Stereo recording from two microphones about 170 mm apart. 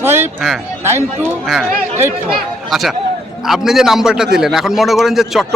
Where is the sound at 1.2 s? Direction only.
Centre (ahead or behind).